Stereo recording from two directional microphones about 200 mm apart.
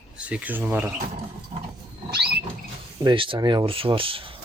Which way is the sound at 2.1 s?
55° right (ahead or behind).